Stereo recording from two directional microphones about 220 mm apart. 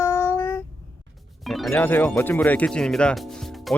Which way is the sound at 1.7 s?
10° left (ahead or behind).